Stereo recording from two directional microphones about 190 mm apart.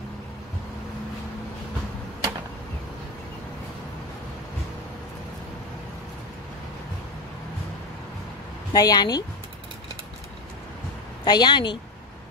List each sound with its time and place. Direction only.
8.7 s a woman's voice: 20° left (ahead or behind)
11.2 s a woman's voice: 20° left (ahead or behind)